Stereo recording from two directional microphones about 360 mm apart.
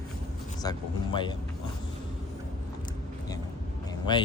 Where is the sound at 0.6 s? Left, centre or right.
Centre.